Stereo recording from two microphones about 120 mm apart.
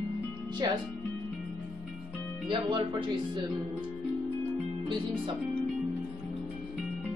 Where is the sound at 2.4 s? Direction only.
40° right (ahead or behind).